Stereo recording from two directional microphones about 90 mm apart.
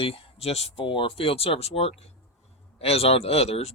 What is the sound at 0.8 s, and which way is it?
Speech, 80° left.